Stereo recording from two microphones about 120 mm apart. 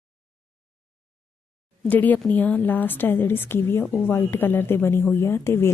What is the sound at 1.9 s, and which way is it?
A woman's voice, 15° left (ahead or behind).